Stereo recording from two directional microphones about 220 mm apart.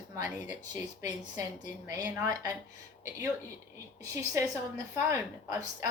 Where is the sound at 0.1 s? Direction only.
15° right (ahead or behind).